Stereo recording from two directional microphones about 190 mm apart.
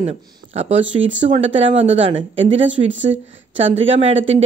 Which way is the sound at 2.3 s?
80° right.